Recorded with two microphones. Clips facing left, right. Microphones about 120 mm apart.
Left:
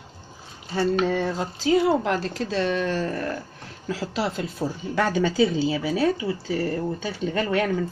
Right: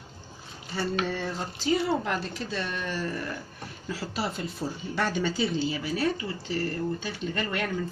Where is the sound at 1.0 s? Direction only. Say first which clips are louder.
Left 7 dB; 80° left.